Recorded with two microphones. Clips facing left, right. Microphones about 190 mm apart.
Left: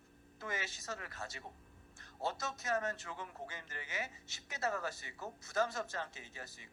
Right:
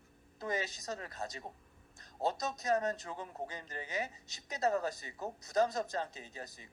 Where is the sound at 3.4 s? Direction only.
15° right (ahead or behind).